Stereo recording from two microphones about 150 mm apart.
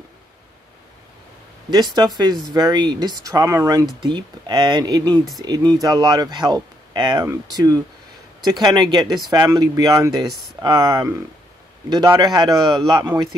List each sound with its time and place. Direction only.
1.7 s speech: 30° right (ahead or behind)
10.3 s speech: centre (ahead or behind)
10.6 s speech: 30° right (ahead or behind)